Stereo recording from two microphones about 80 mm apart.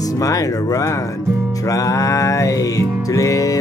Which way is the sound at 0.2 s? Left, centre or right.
Left.